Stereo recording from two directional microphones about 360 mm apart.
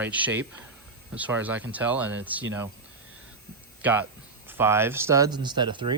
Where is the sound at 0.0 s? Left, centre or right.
Centre.